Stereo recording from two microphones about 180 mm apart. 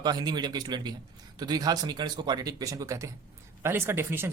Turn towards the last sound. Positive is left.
turn(degrees=-15)  # may be behind; listen again after turning